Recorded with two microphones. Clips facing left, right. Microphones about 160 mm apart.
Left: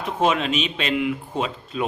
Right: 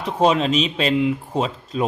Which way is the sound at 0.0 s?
35° right (ahead or behind).